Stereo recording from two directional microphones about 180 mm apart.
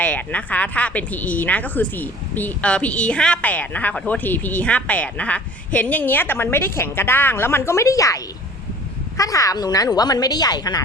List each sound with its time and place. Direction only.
0.0 s a woman's voice: 10° left (ahead or behind)